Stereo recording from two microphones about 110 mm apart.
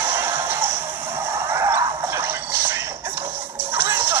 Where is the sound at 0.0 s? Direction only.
20° right (ahead or behind).